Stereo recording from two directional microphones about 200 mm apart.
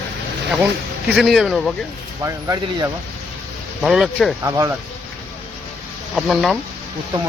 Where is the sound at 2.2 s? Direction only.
15° right (ahead or behind).